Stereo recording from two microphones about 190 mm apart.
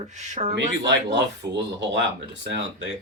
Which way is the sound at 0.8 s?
65° right (ahead or behind).